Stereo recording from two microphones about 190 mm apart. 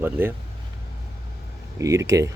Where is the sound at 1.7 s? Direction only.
15° right (ahead or behind).